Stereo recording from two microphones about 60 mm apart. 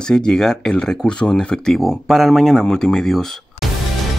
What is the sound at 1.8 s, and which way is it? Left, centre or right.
Speech, centre.